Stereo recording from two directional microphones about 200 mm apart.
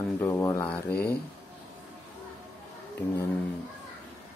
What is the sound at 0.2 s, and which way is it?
Speech, 15° left (ahead or behind).